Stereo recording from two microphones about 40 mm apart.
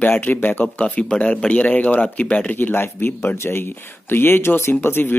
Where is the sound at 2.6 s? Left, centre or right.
Left.